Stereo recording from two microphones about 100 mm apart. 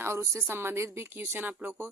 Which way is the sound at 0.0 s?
25° right (ahead or behind).